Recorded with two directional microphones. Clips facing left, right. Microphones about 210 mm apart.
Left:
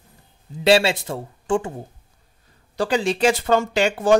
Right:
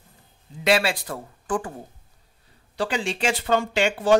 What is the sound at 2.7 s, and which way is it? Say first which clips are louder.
Speech: left 5 dB; 40° left (ahead or behind).